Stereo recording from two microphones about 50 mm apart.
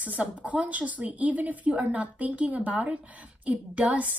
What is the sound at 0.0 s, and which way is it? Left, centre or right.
Speech, right.